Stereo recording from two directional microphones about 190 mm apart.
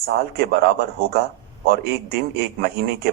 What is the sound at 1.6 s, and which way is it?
Speech, 55° right (ahead or behind).